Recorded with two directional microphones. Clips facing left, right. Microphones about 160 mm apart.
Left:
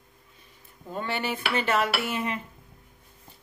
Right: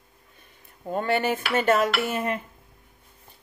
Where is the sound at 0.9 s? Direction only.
50° right (ahead or behind).